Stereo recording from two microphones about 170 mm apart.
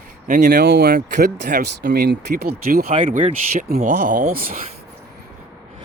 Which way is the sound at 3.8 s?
45° right (ahead or behind).